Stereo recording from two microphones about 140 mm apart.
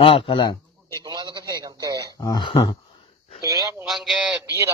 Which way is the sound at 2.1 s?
30° left (ahead or behind).